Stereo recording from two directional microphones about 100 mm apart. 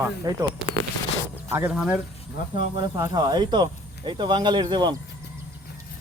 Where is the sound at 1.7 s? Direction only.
10° right (ahead or behind).